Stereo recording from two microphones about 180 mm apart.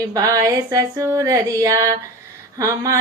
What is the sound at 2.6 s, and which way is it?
Music, 15° right (ahead or behind).